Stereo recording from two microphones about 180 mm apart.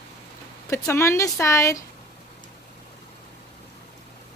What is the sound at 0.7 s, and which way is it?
Speech, 15° left (ahead or behind).